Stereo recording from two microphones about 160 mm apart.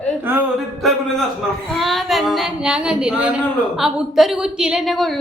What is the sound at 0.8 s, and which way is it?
A woman's voice, centre (ahead or behind).